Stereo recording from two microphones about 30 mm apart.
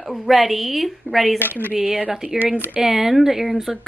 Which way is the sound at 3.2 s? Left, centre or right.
Centre.